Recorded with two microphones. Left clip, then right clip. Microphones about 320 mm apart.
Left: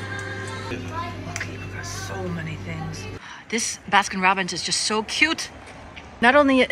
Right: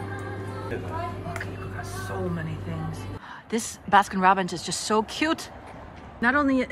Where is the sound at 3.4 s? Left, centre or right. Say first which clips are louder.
Left 2 dB; centre.